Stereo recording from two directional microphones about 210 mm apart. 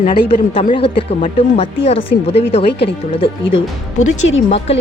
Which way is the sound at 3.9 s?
65° left (ahead or behind).